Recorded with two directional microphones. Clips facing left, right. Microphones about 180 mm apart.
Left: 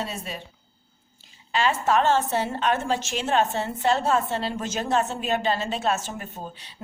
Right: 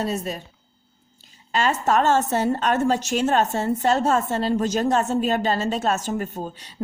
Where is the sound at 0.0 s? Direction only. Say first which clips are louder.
Right 6 dB; 40° right (ahead or behind).